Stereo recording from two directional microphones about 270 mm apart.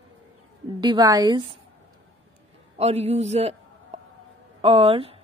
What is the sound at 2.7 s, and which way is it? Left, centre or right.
A man's voice, right.